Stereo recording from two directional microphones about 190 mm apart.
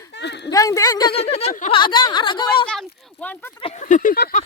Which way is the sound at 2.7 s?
5° left (ahead or behind).